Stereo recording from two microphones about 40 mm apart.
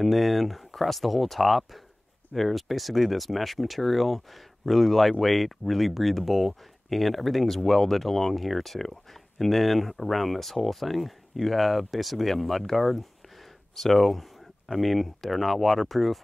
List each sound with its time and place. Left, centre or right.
0.0 s speech: centre